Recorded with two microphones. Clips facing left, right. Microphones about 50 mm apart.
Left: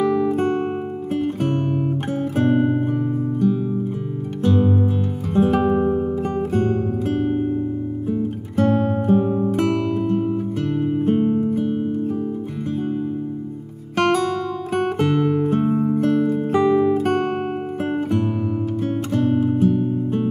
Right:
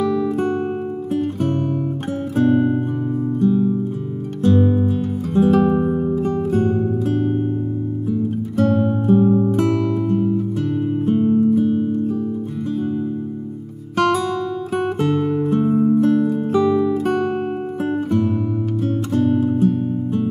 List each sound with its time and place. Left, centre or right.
0.0 s guitar: left
1.1 s music: left
4.6 s music: centre
5.3 s music: left
5.8 s music: centre
6.1 s music: left
9.2 s music: centre
9.6 s music: left
10.7 s music: centre
13.9 s guitar: left
14.7 s music: left
16.5 s guitar: left
18.8 s music: left
19.6 s music: left